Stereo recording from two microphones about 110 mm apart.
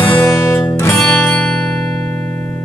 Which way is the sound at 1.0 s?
10° left (ahead or behind).